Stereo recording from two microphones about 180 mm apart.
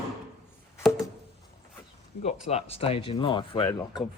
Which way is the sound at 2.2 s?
35° left (ahead or behind).